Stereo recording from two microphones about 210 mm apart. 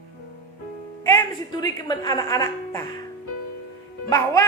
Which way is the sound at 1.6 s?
20° left (ahead or behind).